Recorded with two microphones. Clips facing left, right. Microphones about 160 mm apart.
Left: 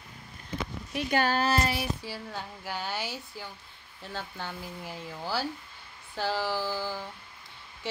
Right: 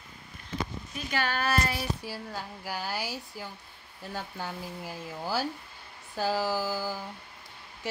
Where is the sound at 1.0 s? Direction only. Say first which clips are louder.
Left 4 dB; 45° left (ahead or behind).